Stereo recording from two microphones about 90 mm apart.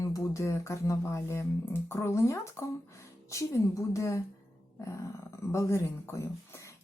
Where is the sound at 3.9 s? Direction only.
35° left (ahead or behind).